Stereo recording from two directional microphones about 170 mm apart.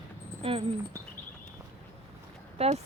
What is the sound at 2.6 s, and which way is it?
Speech, 40° right (ahead or behind).